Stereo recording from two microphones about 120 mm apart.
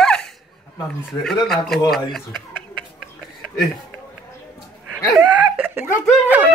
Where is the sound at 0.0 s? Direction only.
5° left (ahead or behind).